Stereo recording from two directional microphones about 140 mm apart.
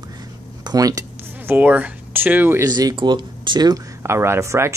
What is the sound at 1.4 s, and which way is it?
Speech, 10° right (ahead or behind).